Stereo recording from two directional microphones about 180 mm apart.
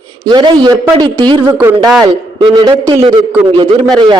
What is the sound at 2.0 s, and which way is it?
A man's voice, 25° right (ahead or behind).